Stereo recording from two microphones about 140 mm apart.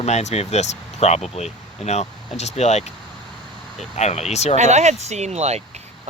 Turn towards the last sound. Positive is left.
turn(degrees=-50)  # may be behind; listen again after turning